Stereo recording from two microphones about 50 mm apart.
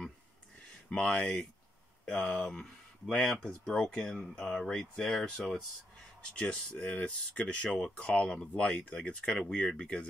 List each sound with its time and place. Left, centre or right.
0.7 s speech: centre
2.1 s speech: centre
2.5 s speech: centre